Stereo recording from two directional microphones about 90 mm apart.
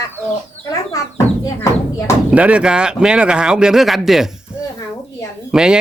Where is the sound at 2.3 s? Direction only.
15° right (ahead or behind).